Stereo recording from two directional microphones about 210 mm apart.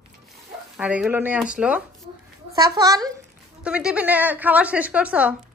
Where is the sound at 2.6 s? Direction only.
20° right (ahead or behind).